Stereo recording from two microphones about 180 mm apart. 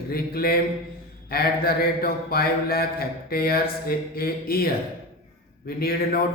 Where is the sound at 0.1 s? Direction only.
55° left (ahead or behind).